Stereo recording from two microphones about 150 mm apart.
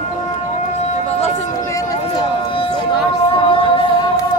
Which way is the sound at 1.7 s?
20° left (ahead or behind).